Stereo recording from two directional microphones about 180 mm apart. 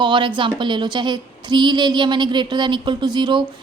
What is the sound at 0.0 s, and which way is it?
A woman's voice, 25° right (ahead or behind).